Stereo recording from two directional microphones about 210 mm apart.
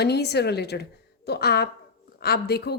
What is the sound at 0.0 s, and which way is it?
A woman's voice, 50° left (ahead or behind).